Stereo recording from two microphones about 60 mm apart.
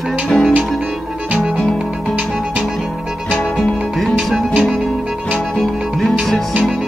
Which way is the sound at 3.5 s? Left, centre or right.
Centre.